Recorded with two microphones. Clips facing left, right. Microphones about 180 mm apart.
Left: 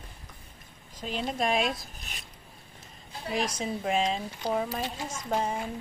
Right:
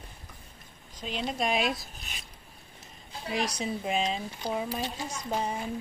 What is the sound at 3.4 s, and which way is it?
Speech, 30° left (ahead or behind).